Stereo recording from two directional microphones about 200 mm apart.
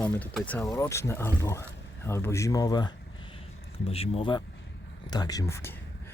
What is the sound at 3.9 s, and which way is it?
Speech, 30° left (ahead or behind).